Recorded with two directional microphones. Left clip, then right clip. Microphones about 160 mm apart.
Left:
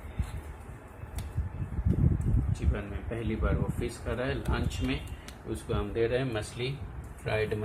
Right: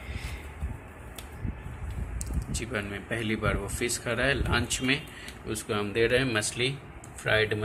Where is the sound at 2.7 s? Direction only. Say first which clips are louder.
Right 6 dB; 5° right (ahead or behind).